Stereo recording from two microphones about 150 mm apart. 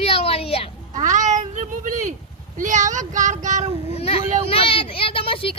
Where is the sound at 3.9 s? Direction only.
40° left (ahead or behind).